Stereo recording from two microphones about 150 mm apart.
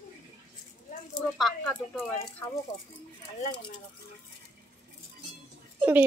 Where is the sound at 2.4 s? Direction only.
25° left (ahead or behind).